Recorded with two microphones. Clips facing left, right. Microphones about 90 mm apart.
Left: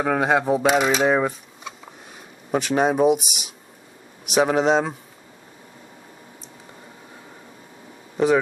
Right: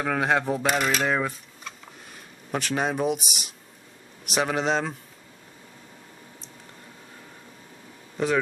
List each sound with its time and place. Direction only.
0.0 s speech: 5° left (ahead or behind)